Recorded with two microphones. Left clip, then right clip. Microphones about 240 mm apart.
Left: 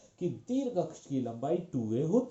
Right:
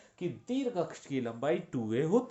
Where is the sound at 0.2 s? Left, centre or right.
Right.